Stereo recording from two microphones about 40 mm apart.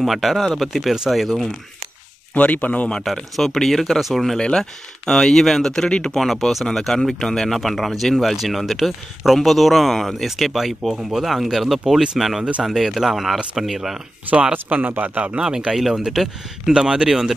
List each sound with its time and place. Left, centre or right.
0.0 s speech: centre
2.3 s speech: left
3.1 s speech: centre
4.4 s speech: centre
5.9 s speech: left
6.1 s speech: centre
6.6 s speech: centre
14.5 s speech: right
15.3 s speech: centre